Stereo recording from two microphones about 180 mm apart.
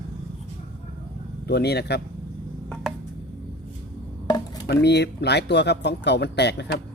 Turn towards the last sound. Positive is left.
turn(degrees=70)  # may be behind; listen again after turning